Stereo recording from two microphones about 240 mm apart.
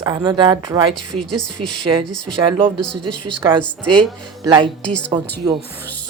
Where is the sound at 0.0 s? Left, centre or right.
Centre.